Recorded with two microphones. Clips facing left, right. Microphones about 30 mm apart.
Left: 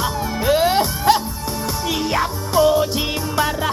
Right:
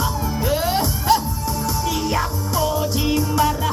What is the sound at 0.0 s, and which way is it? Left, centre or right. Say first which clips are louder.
Music: left 2 dB; left.